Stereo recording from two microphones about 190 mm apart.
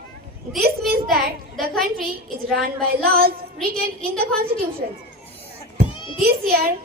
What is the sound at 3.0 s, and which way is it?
Speech, 50° right (ahead or behind).